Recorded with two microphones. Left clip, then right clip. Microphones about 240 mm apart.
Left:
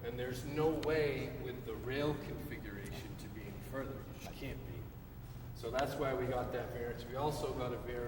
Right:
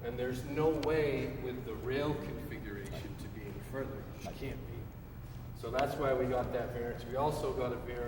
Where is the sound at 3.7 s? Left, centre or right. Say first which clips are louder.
Right 3 dB; left.